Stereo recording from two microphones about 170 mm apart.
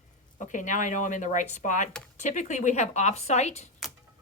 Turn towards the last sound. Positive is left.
turn(degrees=40)  # may be behind; listen again after turning